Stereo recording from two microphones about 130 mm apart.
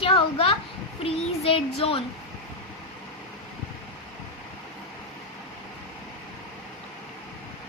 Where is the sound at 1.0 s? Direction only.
45° left (ahead or behind).